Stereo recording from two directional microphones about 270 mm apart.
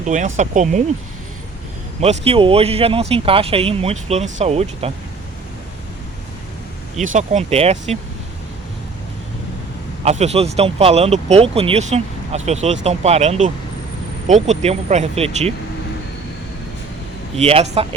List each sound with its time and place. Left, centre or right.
0.0 s speech: right
2.0 s speech: right
7.0 s speech: right
10.0 s speech: right
17.3 s speech: right